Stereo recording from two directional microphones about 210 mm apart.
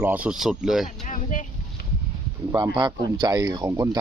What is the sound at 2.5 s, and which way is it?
Speech, 20° right (ahead or behind).